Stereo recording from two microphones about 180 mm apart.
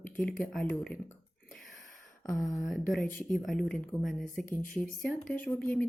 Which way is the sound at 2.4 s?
20° left (ahead or behind).